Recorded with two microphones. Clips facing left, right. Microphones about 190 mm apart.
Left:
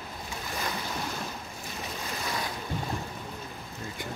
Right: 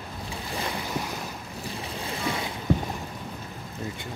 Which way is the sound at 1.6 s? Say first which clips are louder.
Right 4 dB; 30° right (ahead or behind).